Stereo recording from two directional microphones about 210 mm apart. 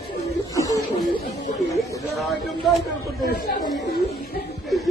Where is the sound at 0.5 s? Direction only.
15° left (ahead or behind).